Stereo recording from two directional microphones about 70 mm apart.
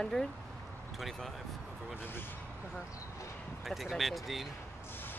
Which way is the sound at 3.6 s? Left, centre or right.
Centre.